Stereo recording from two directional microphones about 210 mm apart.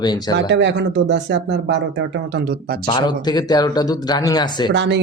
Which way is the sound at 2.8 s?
20° left (ahead or behind).